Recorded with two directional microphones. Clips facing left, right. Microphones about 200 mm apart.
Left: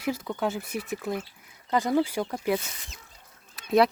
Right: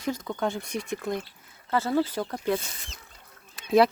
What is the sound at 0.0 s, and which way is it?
Speech, 5° left (ahead or behind).